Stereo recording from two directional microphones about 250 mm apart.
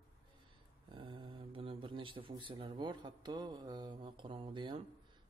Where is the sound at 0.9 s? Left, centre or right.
Centre.